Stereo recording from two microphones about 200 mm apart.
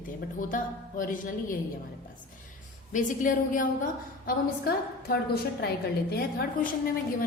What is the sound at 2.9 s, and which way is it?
A woman's voice, 40° left (ahead or behind).